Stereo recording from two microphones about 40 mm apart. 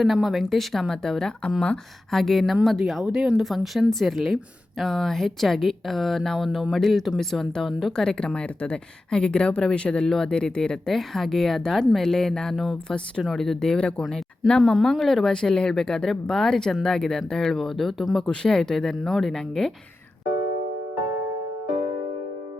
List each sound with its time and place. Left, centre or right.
0.1 s a woman's voice: centre
7.9 s speech: centre
10.8 s a woman's voice: centre
18.3 s speech: centre
19.6 s speech: centre